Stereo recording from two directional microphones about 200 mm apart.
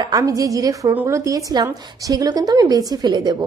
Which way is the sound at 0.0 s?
20° right (ahead or behind).